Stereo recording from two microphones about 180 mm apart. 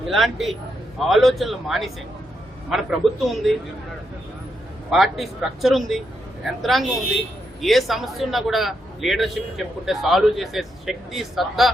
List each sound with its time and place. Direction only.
0.0 s a man's voice: centre (ahead or behind)
4.9 s a man's voice: centre (ahead or behind)